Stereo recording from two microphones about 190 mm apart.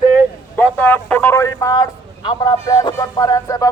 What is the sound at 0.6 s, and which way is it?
A man's voice, 10° left (ahead or behind).